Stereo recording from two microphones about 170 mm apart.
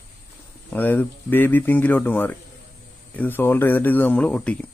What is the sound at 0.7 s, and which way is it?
Speech, 10° left (ahead or behind).